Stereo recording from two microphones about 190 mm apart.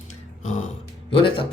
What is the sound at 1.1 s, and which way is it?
Speech, 25° left (ahead or behind).